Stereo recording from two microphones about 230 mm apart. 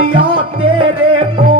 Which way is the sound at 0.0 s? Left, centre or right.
Right.